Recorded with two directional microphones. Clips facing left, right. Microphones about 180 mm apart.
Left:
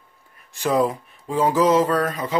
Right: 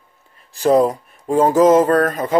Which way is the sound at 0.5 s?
40° right (ahead or behind).